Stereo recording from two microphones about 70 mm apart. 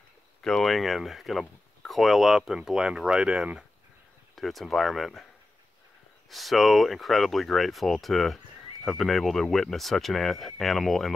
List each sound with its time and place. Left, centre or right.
0.4 s speech: centre
4.4 s speech: centre
6.3 s speech: centre